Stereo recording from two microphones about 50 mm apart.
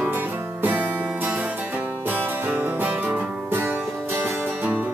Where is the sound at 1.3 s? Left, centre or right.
Right.